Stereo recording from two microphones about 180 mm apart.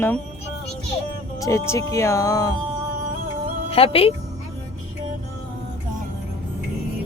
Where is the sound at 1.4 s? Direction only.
15° left (ahead or behind).